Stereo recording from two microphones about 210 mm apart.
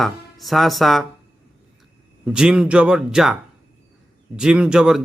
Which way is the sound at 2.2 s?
5° right (ahead or behind).